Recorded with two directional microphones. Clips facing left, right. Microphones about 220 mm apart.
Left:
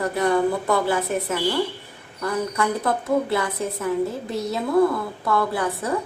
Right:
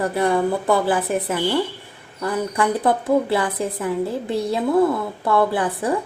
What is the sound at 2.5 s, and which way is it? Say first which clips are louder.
A woman's voice: right 4 dB; 30° right (ahead or behind).